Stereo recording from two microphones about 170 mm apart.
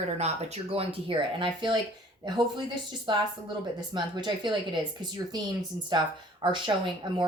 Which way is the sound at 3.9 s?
25° right (ahead or behind).